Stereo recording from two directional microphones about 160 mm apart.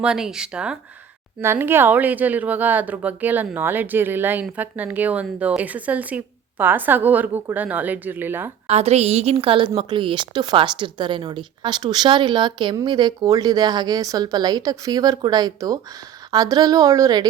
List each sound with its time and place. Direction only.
0.0 s a woman's voice: 5° right (ahead or behind)
8.6 s a woman's voice: 40° right (ahead or behind); by 17.2 s 25° right (ahead or behind)